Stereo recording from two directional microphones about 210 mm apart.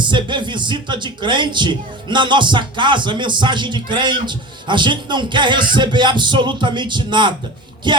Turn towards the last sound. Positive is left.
turn(degrees=-20)  # may be behind; listen again after turning